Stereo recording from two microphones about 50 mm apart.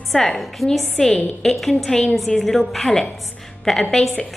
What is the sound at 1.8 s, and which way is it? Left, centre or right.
Speech, centre.